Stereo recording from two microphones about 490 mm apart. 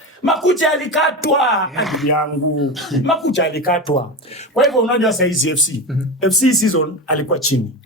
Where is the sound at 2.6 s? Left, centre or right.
Centre.